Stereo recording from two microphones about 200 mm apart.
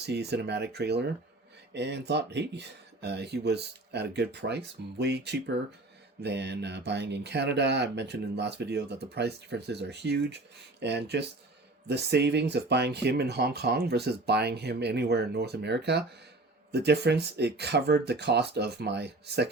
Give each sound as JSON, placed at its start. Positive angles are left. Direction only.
{"t": 0.0, "sound": "speech", "side_deg": -55}